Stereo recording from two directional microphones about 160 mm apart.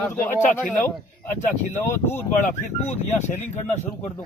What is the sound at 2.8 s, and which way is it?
Speech, 45° left (ahead or behind).